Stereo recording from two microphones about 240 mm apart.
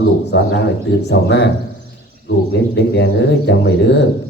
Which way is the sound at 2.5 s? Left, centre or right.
Left.